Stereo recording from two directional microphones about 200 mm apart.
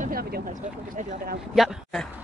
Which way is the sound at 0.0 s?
50° right (ahead or behind).